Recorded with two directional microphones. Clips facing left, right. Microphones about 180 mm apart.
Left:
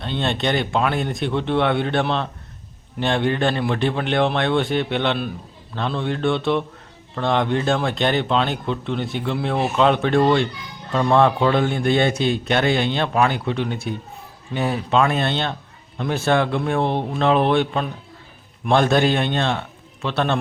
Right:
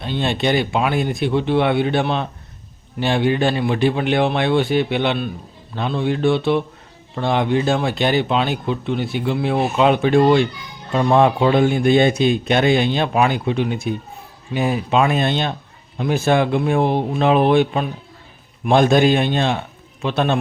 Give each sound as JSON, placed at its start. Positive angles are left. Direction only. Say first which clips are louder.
{"t": 0.0, "sound": "a man's voice", "louder": "right 2 dB", "side_deg": -10}